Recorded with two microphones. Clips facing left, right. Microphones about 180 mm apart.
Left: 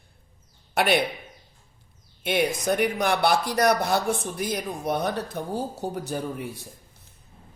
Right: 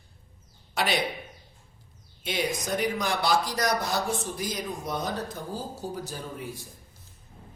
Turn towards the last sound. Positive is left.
turn(degrees=60)  # may be behind; listen again after turning